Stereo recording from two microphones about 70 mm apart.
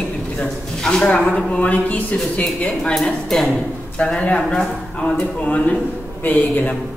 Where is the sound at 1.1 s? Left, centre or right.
Centre.